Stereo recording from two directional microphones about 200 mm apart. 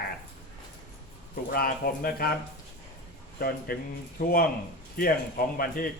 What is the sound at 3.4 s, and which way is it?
Speech, 50° left (ahead or behind).